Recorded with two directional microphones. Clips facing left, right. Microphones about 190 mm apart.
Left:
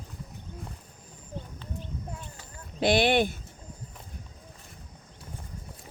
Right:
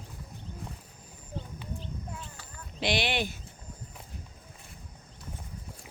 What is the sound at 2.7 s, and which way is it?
Speech, 50° left (ahead or behind).